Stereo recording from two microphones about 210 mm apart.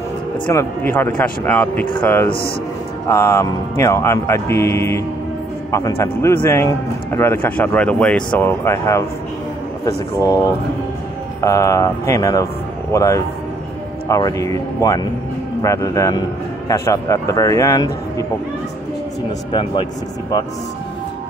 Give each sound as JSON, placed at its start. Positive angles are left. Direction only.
{"t": 0.5, "sound": "speech", "side_deg": 10}
{"t": 10.2, "sound": "speech", "side_deg": 15}
{"t": 19.5, "sound": "speech", "side_deg": 25}